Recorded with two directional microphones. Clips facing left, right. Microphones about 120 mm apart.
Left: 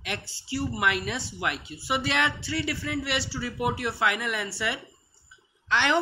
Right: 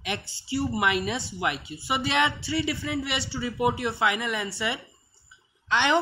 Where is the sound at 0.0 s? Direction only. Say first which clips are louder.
Right 2 dB; centre (ahead or behind).